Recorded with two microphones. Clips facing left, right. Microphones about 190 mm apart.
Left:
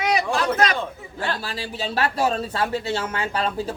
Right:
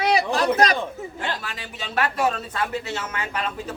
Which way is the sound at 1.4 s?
30° left (ahead or behind).